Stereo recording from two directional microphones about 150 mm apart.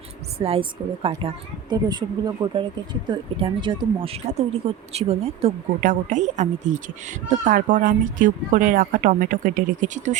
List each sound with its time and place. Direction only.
0.3 s speech: 40° right (ahead or behind)
5.8 s speech: 60° right (ahead or behind)